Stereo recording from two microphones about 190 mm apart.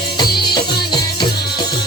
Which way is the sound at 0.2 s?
25° left (ahead or behind).